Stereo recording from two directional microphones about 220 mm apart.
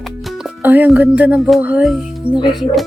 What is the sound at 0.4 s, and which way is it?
Speech, 10° right (ahead or behind).